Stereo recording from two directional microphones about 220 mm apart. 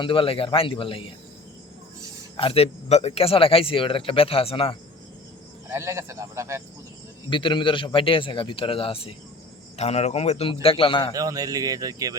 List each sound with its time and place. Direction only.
0.0 s speech: 25° left (ahead or behind)
2.3 s speech: 25° left (ahead or behind)
5.6 s a man's voice: 15° right (ahead or behind)
7.3 s speech: 20° left (ahead or behind)
11.1 s a man's voice: 15° right (ahead or behind)